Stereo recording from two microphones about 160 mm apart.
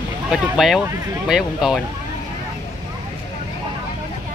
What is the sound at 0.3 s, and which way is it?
Speech, centre (ahead or behind).